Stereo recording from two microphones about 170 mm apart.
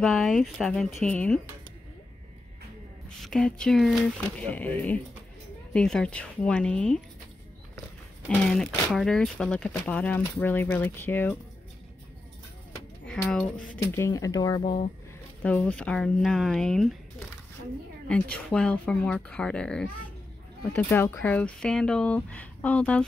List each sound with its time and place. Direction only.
0.0 s speech: centre (ahead or behind)
3.2 s speech: 5° left (ahead or behind)
8.3 s speech: 5° left (ahead or behind)
13.0 s speech: 5° left (ahead or behind)
13.9 s speech: 20° left (ahead or behind)
14.6 s speech: 35° left (ahead or behind)
15.4 s speech: 5° left (ahead or behind)